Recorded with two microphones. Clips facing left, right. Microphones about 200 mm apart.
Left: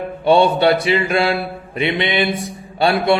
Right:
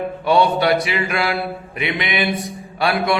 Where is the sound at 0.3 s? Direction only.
30° left (ahead or behind).